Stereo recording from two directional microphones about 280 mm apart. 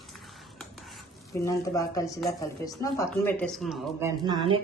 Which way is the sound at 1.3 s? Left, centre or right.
Centre.